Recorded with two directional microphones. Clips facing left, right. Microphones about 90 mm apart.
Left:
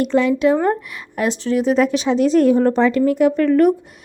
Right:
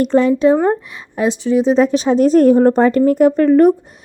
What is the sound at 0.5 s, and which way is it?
Speech, 20° right (ahead or behind).